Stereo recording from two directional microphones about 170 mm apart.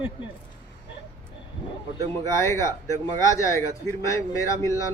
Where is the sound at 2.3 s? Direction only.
15° left (ahead or behind).